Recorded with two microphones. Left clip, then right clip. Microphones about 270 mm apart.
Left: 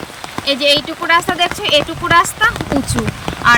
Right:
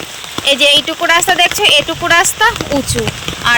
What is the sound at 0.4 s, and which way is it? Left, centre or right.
Speech, centre.